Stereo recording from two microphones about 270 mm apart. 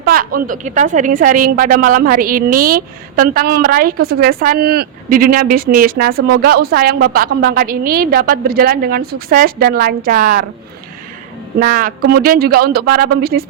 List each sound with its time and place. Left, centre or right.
0.0 s a woman's voice: right
11.6 s a woman's voice: right